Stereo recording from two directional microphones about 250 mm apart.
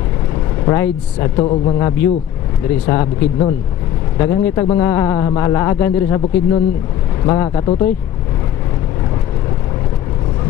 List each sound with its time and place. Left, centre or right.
0.7 s a man's voice: centre